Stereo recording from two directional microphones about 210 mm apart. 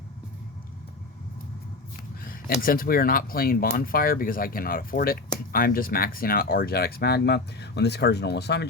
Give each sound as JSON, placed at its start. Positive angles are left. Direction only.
{"t": 2.2, "sound": "speech", "side_deg": 45}